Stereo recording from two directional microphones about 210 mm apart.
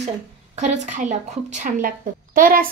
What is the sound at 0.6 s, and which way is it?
A woman's voice, 35° right (ahead or behind).